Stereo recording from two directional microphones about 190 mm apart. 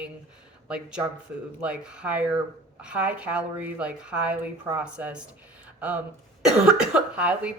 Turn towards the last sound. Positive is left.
turn(degrees=-5)  # may be behind; listen again after turning